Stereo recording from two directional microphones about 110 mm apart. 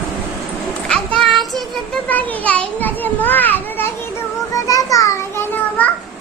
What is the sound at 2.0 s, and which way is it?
A child's voice, 15° left (ahead or behind).